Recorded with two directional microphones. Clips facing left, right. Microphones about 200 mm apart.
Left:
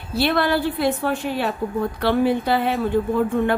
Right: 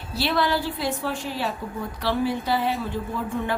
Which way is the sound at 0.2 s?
55° left (ahead or behind).